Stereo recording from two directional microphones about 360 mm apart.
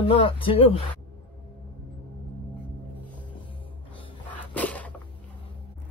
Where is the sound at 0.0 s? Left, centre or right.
Centre.